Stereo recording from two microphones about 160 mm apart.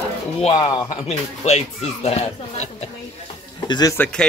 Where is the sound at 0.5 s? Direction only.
25° left (ahead or behind).